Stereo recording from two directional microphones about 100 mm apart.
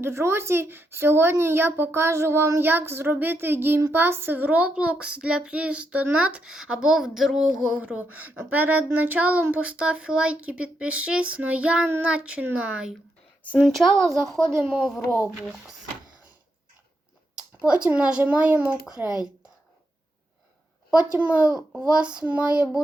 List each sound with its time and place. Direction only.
0.0 s a woman's voice: 25° right (ahead or behind); by 14.9 s 5° right (ahead or behind)
17.7 s speech: 10° right (ahead or behind)
21.0 s speech: 15° right (ahead or behind)